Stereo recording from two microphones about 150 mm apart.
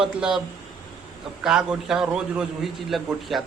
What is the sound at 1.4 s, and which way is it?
A man's voice, 5° right (ahead or behind).